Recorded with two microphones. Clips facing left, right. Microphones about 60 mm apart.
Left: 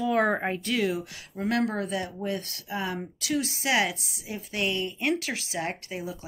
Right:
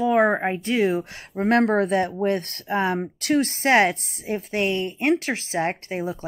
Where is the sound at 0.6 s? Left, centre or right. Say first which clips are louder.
Right 6 dB; right.